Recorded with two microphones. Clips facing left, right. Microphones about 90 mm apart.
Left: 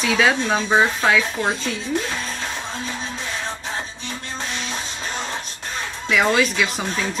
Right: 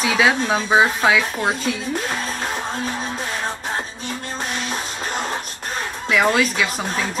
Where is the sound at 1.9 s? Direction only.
45° right (ahead or behind).